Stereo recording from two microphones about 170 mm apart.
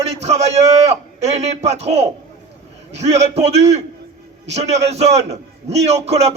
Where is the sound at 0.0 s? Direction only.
40° right (ahead or behind).